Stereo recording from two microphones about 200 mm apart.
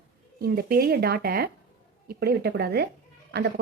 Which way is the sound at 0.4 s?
50° right (ahead or behind).